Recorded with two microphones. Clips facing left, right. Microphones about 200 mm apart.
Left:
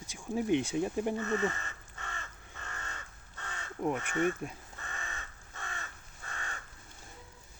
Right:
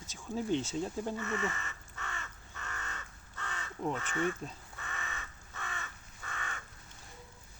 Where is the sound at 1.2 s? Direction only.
35° left (ahead or behind).